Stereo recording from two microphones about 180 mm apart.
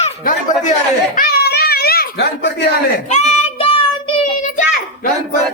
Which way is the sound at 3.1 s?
35° left (ahead or behind).